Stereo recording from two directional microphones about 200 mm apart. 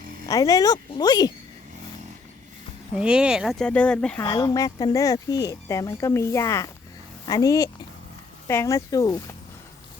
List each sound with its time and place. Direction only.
0.3 s speech: 15° left (ahead or behind)
2.9 s speech: 5° right (ahead or behind)
4.2 s speech: 20° left (ahead or behind)